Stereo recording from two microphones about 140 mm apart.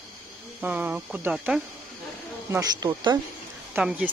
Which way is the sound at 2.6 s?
25° right (ahead or behind).